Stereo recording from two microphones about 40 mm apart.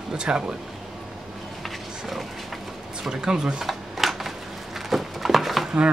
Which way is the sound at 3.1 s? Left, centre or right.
Centre.